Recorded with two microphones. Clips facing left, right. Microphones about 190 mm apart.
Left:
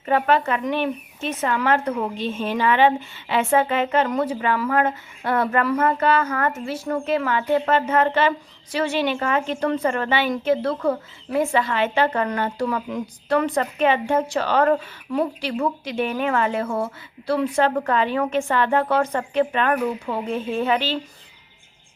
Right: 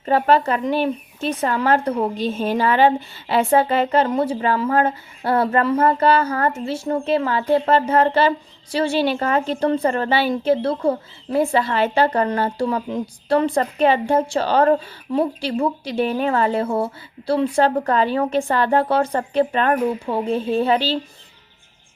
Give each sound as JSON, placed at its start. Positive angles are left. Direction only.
{"t": 0.0, "sound": "a woman's voice", "side_deg": -35}